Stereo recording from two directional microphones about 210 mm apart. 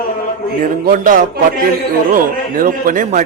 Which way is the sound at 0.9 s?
40° right (ahead or behind).